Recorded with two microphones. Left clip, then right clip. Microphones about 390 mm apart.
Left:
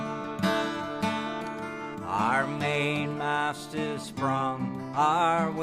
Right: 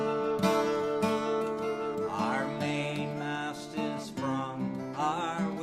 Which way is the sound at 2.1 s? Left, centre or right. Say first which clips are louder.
Left 5 dB; left.